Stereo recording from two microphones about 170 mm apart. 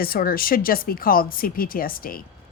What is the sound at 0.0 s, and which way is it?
A woman's voice, 60° left (ahead or behind).